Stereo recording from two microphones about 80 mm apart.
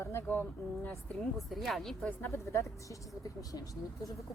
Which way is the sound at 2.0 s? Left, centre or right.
Centre.